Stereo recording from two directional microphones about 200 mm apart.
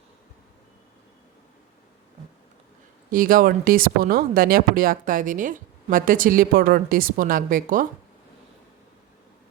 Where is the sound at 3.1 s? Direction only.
45° right (ahead or behind).